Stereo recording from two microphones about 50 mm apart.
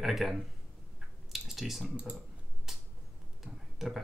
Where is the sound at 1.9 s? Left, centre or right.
Right.